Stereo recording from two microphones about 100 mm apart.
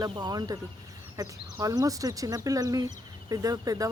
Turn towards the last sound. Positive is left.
turn(degrees=-40)  # may be behind; listen again after turning